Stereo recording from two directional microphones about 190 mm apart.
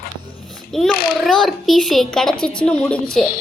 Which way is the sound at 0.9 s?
50° left (ahead or behind).